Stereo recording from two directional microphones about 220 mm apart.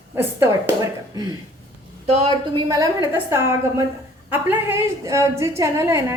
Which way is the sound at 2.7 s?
15° right (ahead or behind).